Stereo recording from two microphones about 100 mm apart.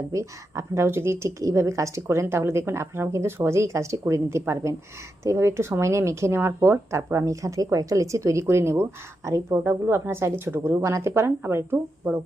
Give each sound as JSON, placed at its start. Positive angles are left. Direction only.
{"t": 0.1, "sound": "speech", "side_deg": -30}